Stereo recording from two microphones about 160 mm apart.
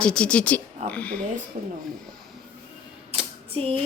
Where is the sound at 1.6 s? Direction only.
50° right (ahead or behind).